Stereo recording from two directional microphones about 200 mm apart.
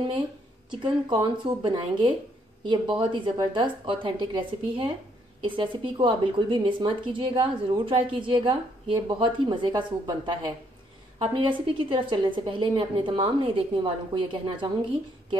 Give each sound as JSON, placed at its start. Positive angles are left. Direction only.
{"t": 0.7, "sound": "speech", "side_deg": -25}